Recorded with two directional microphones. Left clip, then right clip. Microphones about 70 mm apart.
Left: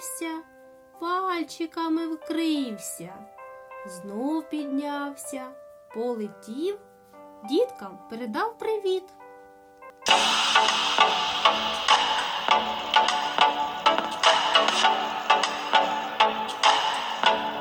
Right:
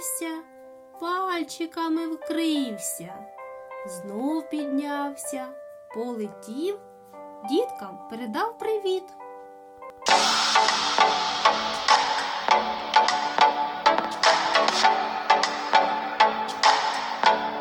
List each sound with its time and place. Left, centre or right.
0.0 s music: centre
0.9 s speech: centre
10.1 s music: right